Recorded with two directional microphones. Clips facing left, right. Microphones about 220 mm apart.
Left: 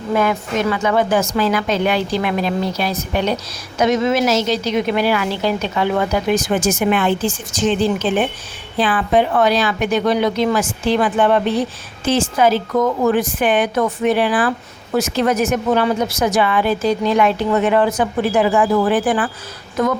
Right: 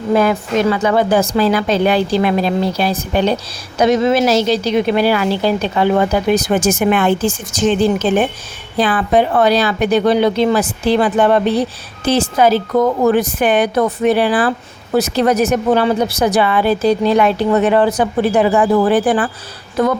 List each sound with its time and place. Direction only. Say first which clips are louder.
0.1 s a woman's voice: right 4 dB; 35° right (ahead or behind)